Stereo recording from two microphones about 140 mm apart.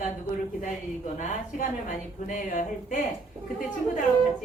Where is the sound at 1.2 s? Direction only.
70° left (ahead or behind).